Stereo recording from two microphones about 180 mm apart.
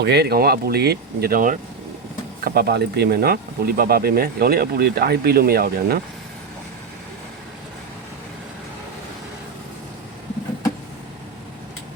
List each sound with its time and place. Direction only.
0.0 s speech: 65° right (ahead or behind); by 1.5 s 50° right (ahead or behind)
2.4 s speech: 65° right (ahead or behind)